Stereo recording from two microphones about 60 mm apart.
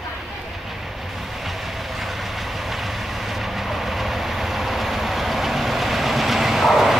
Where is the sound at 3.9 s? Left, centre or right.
Centre.